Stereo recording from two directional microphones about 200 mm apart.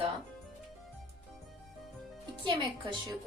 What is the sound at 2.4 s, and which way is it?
Speech, 25° right (ahead or behind).